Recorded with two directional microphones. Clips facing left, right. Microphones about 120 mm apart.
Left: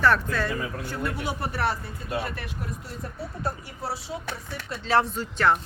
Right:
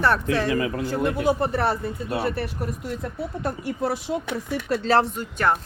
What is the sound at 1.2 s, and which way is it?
Speech, 45° right (ahead or behind).